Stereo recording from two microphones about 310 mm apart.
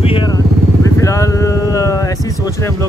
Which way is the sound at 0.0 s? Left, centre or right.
Centre.